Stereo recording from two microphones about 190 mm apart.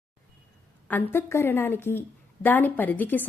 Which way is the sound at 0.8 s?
10° left (ahead or behind).